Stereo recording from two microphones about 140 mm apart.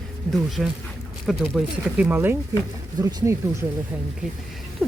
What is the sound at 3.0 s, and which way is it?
Speech, 30° right (ahead or behind).